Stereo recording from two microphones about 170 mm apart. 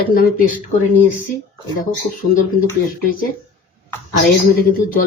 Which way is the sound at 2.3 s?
55° left (ahead or behind).